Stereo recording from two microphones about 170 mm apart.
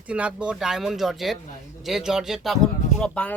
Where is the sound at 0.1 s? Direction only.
5° right (ahead or behind).